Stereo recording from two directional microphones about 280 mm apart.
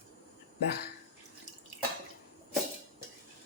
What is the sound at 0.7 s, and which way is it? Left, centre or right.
Speech, left.